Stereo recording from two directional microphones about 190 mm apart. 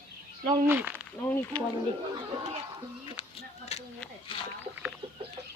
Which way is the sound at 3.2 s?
35° left (ahead or behind).